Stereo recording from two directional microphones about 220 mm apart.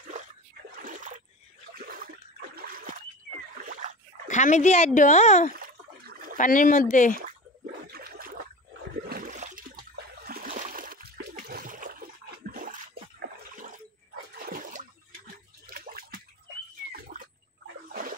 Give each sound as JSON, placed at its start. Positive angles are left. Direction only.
{"t": 0.7, "sound": "splash", "side_deg": -40}
{"t": 1.8, "sound": "water", "side_deg": -40}
{"t": 2.5, "sound": "trickle", "side_deg": -40}
{"t": 4.3, "sound": "speech", "side_deg": 35}
{"t": 5.5, "sound": "a sound", "side_deg": -40}
{"t": 6.3, "sound": "speech", "side_deg": 35}
{"t": 7.8, "sound": "a sound", "side_deg": -45}
{"t": 9.1, "sound": "splash", "side_deg": -35}
{"t": 12.4, "sound": "water", "side_deg": -40}
{"t": 14.4, "sound": "a sound", "side_deg": -40}